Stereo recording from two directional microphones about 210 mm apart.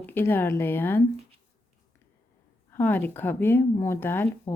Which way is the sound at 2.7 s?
10° left (ahead or behind).